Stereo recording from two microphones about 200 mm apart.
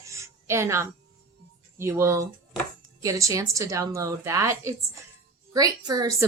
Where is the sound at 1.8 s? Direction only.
15° right (ahead or behind).